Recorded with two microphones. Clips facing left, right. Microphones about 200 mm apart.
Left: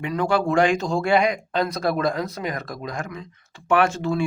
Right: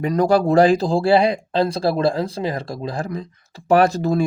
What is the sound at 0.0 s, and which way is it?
Speech, 40° right (ahead or behind).